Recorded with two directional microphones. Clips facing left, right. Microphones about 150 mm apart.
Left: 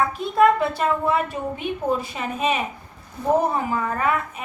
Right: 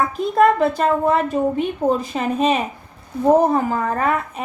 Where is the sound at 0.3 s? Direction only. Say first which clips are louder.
Right 2 dB; 40° right (ahead or behind).